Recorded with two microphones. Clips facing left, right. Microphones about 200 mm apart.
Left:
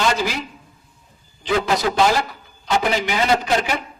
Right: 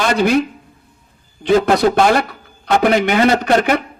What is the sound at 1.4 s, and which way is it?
A man's voice, 60° right (ahead or behind).